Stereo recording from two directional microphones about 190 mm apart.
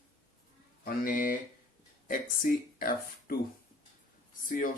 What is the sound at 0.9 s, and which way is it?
A man's voice, 45° left (ahead or behind).